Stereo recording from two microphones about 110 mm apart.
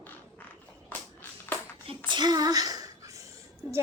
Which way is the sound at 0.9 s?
15° left (ahead or behind).